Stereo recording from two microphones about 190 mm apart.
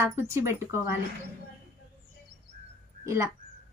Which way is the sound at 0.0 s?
15° right (ahead or behind).